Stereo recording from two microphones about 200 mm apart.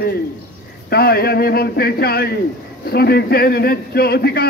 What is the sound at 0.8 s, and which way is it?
A man's voice, 50° left (ahead or behind).